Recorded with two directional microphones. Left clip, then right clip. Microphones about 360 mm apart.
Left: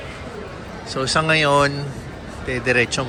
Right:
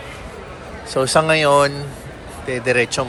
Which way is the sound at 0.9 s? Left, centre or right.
Centre.